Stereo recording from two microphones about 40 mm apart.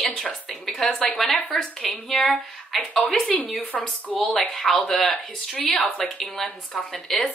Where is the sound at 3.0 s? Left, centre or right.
Left.